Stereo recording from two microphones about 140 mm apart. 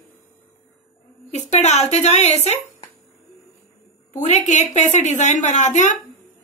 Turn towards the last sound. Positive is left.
turn(degrees=60)  # may be behind; listen again after turning